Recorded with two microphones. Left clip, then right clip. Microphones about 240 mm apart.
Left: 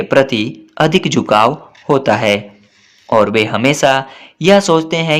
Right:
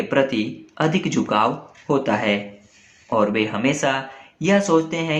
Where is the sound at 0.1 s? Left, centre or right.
Left.